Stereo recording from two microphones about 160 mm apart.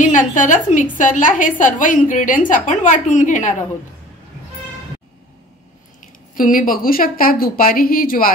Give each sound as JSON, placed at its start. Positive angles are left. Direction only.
{"t": 0.0, "sound": "a woman's voice", "side_deg": 55}
{"t": 6.3, "sound": "a woman's voice", "side_deg": 60}